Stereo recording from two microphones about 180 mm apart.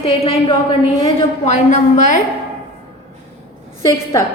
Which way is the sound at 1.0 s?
40° left (ahead or behind).